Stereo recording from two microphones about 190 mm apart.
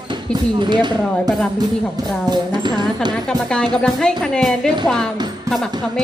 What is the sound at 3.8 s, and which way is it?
Speech, 5° left (ahead or behind).